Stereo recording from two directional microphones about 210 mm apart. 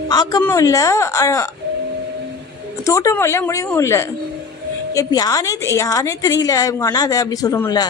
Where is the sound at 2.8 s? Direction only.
15° left (ahead or behind).